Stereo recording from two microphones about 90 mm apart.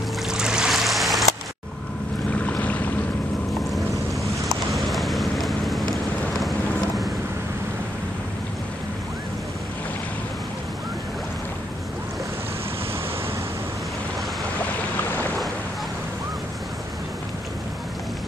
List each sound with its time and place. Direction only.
0.3 s boat: 10° right (ahead or behind)
2.4 s boat: 15° left (ahead or behind)
4.5 s a sound: centre (ahead or behind)